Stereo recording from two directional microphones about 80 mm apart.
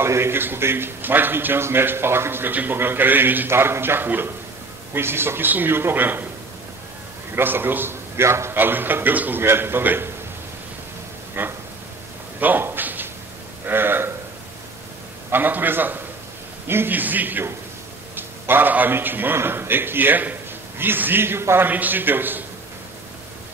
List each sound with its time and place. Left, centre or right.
0.0 s a man's voice: right
7.3 s a man's voice: right
11.4 s a man's voice: right
12.4 s a sound: right
13.7 s speech: right
15.3 s a man's voice: right